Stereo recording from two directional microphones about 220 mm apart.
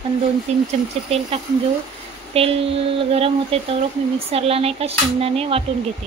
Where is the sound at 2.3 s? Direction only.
25° right (ahead or behind).